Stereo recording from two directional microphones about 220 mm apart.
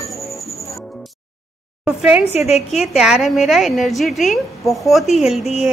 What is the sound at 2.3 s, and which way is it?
Speech, 30° left (ahead or behind).